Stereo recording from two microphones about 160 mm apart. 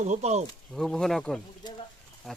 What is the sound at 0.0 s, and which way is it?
Speech, 45° right (ahead or behind).